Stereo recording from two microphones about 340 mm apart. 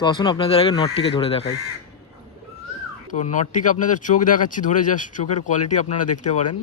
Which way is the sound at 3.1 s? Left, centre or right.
Left.